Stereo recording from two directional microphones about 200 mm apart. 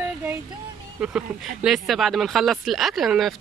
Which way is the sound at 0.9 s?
5° right (ahead or behind).